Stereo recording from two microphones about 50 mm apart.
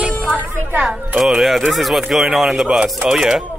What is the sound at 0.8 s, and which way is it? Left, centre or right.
Speech, centre.